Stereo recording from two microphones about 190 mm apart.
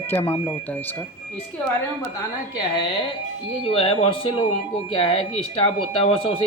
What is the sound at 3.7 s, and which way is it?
Speech, 30° left (ahead or behind).